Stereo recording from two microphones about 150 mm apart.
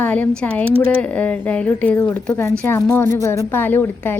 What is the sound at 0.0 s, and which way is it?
Speech, 10° left (ahead or behind).